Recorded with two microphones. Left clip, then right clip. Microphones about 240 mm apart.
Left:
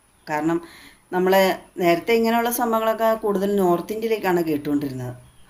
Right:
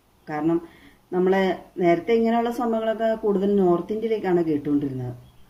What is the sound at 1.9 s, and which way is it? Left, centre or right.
Speech, left.